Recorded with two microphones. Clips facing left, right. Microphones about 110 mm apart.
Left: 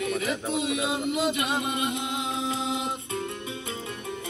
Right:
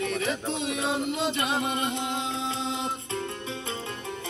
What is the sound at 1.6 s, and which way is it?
Music, 35° right (ahead or behind).